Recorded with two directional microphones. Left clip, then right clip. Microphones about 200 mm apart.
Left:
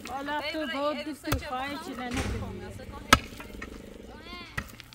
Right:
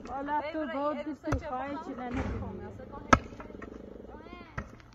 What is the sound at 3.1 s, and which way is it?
Chop, 35° left (ahead or behind).